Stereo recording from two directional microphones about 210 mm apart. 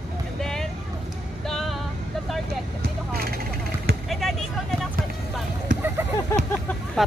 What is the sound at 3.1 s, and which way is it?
Vehicle, 45° right (ahead or behind).